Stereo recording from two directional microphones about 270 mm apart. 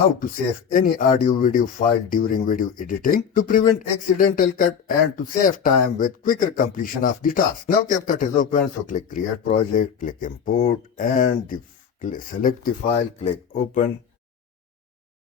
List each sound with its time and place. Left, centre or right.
0.2 s speech: left